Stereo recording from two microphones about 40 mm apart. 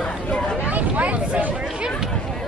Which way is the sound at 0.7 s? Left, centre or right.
Right.